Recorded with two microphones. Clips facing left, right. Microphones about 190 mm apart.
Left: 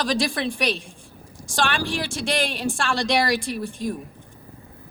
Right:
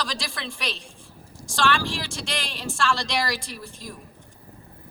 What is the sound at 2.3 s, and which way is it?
A woman's voice, 55° left (ahead or behind).